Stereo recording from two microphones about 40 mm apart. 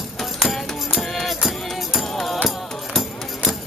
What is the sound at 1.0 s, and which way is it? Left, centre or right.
Music, centre.